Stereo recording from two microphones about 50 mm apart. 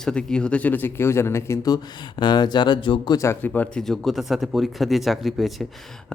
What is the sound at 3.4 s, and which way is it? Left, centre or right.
Speech, left.